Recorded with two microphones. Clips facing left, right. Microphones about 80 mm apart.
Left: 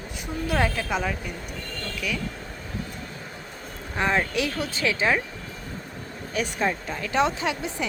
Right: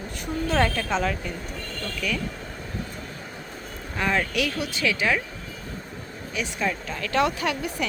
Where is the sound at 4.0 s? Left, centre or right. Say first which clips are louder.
Left 1 dB; left.